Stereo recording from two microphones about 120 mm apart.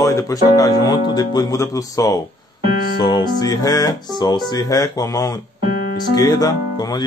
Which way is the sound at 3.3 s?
35° left (ahead or behind).